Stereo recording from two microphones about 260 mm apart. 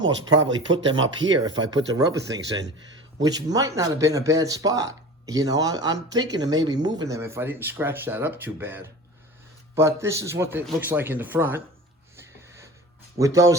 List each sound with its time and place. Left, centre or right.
0.0 s speech: right
1.3 s speech: centre
3.2 s speech: centre
13.1 s speech: centre